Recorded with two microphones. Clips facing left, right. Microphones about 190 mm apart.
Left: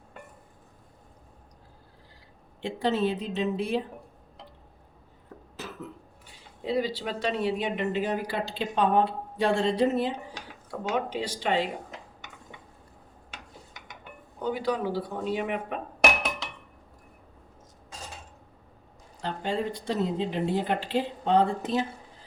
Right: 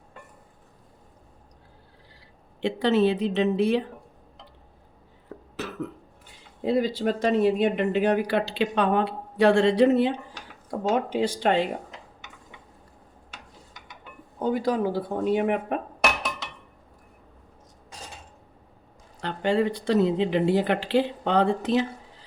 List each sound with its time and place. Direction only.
2.6 s speech: 75° right (ahead or behind)
5.6 s cough: 70° right (ahead or behind)
6.6 s speech: 55° right (ahead or behind)
10.7 s speech: 45° right (ahead or behind)
14.4 s speech: 45° right (ahead or behind)
19.2 s speech: 70° right (ahead or behind)